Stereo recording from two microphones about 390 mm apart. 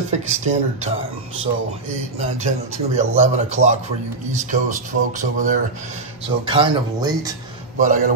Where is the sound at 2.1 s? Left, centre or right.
Centre.